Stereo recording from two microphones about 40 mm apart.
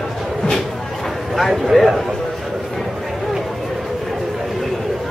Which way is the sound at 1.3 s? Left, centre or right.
Centre.